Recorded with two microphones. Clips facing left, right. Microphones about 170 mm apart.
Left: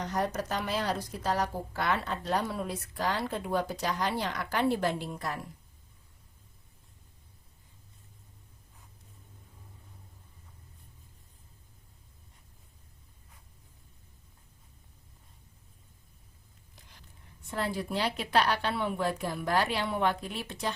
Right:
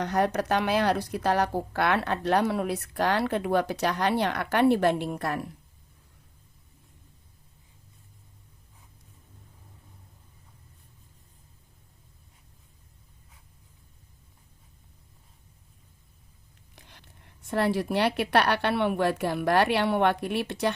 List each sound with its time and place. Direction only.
0.0 s speech: 65° right (ahead or behind)
16.7 s speech: 70° right (ahead or behind)